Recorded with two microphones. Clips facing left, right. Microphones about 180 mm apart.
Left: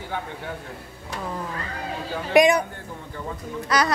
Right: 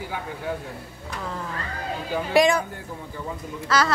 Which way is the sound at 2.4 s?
20° left (ahead or behind).